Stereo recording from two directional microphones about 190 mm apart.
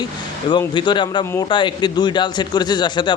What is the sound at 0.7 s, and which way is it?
Speech, 25° left (ahead or behind).